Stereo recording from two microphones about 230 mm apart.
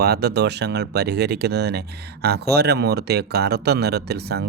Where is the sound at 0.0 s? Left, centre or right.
Right.